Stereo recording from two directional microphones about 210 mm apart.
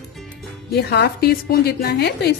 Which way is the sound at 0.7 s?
50° left (ahead or behind).